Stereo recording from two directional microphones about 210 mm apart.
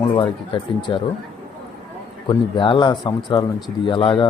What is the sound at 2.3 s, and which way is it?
Speech, 25° left (ahead or behind).